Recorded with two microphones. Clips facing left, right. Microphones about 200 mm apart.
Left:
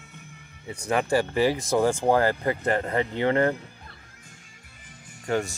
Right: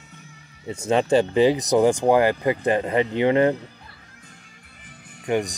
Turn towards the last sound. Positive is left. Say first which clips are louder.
# right 3 dB
turn(degrees=-15)  # may be behind; listen again after turning